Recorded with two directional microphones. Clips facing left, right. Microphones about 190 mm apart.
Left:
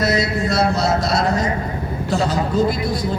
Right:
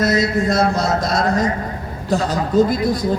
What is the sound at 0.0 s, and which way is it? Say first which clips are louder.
A man's voice: right 2 dB; 50° right (ahead or behind).